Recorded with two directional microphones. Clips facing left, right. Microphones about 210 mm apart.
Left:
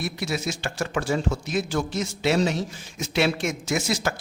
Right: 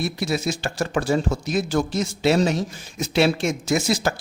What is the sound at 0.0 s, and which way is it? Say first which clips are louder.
Speech: right 4 dB; 35° right (ahead or behind).